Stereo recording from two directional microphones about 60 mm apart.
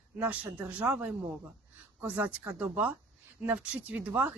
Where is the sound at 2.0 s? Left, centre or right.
Right.